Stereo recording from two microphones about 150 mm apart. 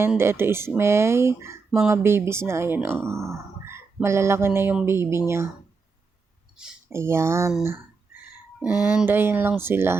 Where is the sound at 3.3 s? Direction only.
15° right (ahead or behind).